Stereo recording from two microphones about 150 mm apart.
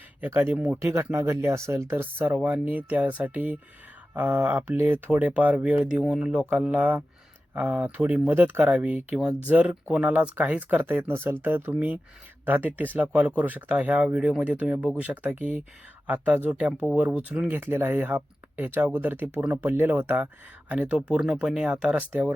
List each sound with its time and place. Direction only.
0.2 s speech: 15° right (ahead or behind)